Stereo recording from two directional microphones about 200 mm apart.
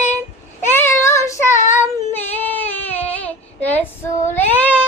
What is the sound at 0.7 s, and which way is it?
Child singing, 10° left (ahead or behind).